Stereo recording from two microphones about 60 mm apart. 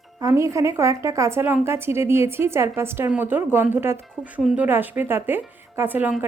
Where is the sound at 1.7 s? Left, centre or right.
Right.